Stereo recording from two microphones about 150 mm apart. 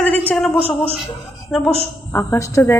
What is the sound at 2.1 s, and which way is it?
Speech, 15° left (ahead or behind).